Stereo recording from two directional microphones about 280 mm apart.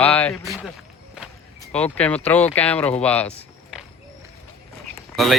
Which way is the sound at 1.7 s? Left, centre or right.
Centre.